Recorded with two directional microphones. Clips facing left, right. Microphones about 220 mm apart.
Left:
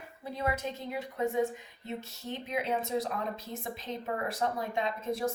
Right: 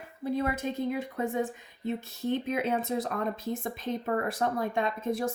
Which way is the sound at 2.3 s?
55° right (ahead or behind).